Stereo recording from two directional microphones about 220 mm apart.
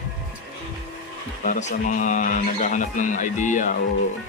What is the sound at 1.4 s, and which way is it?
Speech, 35° left (ahead or behind).